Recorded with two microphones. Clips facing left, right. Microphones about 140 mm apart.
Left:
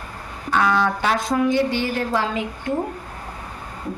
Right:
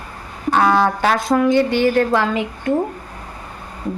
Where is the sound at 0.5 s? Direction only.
35° right (ahead or behind).